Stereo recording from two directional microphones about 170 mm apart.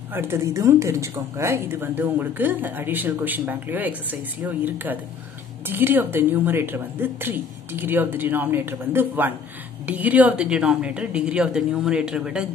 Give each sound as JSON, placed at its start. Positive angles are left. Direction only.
{"t": 0.1, "sound": "a woman's voice", "side_deg": -15}